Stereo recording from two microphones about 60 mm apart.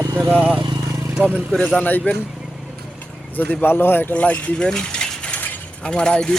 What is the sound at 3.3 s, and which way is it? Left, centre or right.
Speech, left.